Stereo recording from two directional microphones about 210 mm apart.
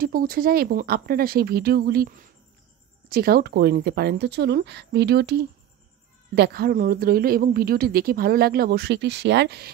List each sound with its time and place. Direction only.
0.0 s speech: 45° right (ahead or behind)